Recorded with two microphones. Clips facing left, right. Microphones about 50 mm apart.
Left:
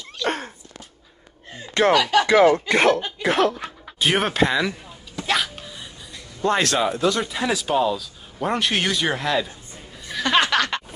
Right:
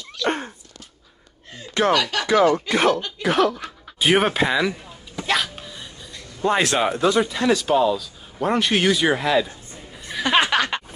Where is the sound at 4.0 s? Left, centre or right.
Centre.